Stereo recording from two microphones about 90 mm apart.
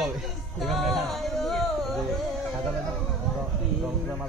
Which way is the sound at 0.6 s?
Centre (ahead or behind).